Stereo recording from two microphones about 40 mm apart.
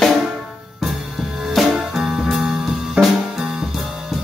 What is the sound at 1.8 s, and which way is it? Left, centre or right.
Music, centre.